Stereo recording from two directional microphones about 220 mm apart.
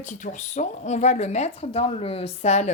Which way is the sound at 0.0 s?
35° left (ahead or behind).